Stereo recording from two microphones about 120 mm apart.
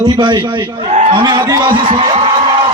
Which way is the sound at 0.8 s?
80° right.